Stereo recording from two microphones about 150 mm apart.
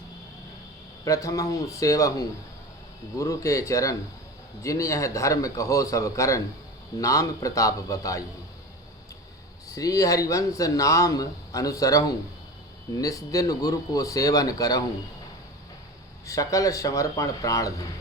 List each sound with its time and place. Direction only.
1.0 s speech: 20° left (ahead or behind)
9.6 s speech: 25° left (ahead or behind)
16.2 s speech: 20° left (ahead or behind)